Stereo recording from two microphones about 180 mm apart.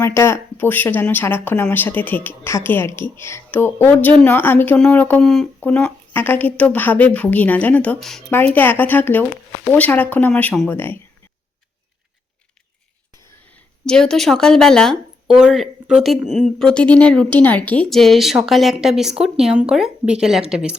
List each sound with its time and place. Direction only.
0.0 s speech: 15° left (ahead or behind)
13.1 s a sound: 15° left (ahead or behind)
13.8 s a woman's voice: 5° left (ahead or behind)